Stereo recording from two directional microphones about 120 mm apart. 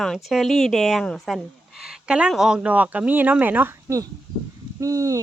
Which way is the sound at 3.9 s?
25° right (ahead or behind).